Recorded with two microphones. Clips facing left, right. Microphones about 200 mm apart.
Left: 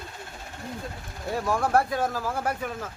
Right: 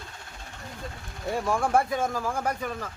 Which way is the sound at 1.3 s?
Centre (ahead or behind).